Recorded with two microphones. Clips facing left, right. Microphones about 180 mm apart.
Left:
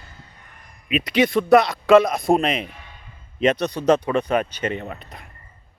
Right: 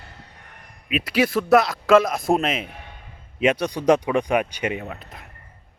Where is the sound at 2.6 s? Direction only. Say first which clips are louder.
Right 1 dB; 55° right (ahead or behind).